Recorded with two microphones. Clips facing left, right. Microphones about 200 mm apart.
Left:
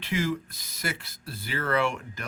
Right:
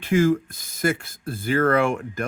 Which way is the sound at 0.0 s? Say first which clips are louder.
Right 10 dB; 50° right (ahead or behind).